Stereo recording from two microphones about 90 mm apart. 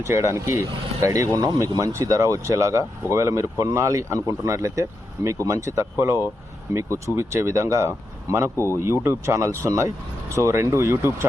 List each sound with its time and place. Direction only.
0.0 s speech: 30° right (ahead or behind)
8.5 s speech: 30° left (ahead or behind)
8.8 s speech: 30° right (ahead or behind)